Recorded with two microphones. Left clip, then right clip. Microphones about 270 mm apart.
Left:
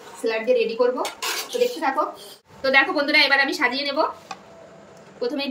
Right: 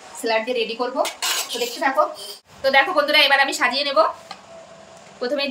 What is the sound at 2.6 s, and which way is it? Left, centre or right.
A woman's voice, centre.